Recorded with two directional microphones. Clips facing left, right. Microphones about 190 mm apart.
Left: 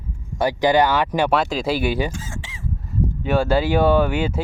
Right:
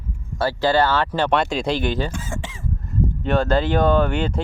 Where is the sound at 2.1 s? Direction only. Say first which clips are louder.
Right 3 dB; 55° right (ahead or behind).